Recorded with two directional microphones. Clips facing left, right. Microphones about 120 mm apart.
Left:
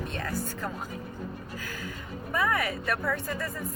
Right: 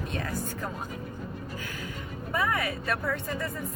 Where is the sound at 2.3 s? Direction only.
25° right (ahead or behind).